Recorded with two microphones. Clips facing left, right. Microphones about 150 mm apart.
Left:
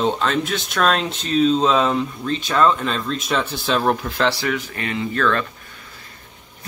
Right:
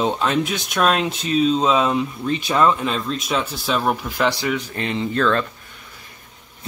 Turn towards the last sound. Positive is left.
turn(degrees=-25)  # may be behind; listen again after turning